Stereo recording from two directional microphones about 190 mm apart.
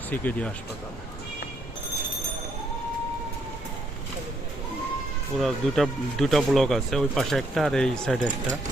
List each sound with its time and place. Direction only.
0.1 s speech: 10° left (ahead or behind)
5.4 s speech: centre (ahead or behind)